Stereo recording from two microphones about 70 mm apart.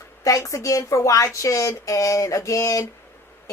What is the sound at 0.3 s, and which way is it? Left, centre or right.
A woman's voice, left.